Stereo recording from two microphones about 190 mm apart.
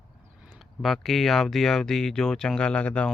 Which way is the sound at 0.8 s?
Centre (ahead or behind).